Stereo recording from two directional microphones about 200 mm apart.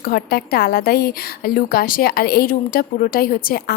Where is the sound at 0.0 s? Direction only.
50° left (ahead or behind).